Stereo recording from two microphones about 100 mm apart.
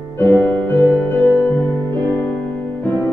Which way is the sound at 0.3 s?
10° left (ahead or behind).